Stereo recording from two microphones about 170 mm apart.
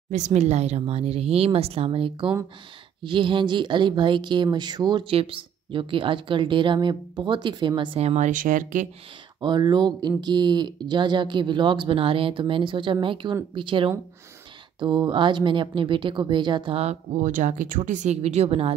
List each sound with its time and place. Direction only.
0.1 s speech: 45° right (ahead or behind)
9.4 s speech: 25° right (ahead or behind)